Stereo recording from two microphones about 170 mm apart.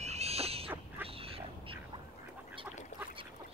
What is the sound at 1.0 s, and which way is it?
Duck, 35° right (ahead or behind).